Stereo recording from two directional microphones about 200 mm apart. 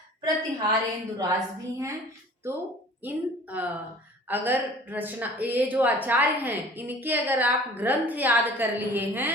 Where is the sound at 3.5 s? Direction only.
5° right (ahead or behind).